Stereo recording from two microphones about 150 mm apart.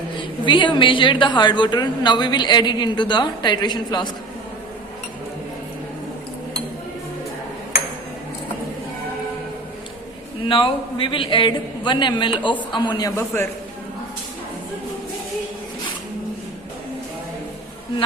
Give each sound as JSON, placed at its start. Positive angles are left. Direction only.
{"t": 0.2, "sound": "a woman's voice", "side_deg": 30}
{"t": 10.5, "sound": "a woman's voice", "side_deg": 35}